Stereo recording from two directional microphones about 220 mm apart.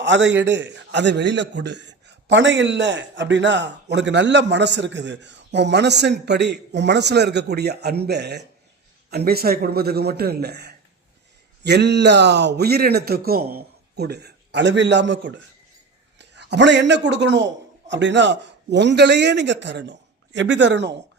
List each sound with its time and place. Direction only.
0.0 s a man's voice: 55° right (ahead or behind)